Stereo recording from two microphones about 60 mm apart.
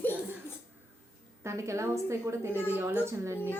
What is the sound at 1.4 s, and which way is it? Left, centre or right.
Speech, right.